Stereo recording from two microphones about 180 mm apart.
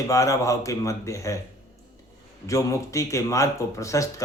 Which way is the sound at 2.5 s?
15° left (ahead or behind).